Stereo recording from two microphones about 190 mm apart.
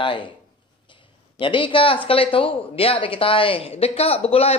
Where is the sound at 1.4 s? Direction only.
25° left (ahead or behind).